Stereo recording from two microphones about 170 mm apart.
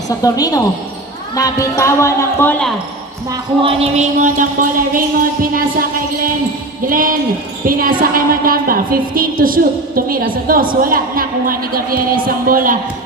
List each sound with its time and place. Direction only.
0.2 s a woman's voice: 20° left (ahead or behind)
3.6 s a sound: 45° right (ahead or behind)
4.9 s a woman's voice: 55° right (ahead or behind)
6.8 s a woman's voice: 55° right (ahead or behind)